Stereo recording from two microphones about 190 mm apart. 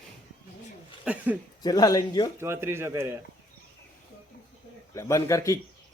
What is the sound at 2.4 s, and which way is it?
Speech, 10° right (ahead or behind).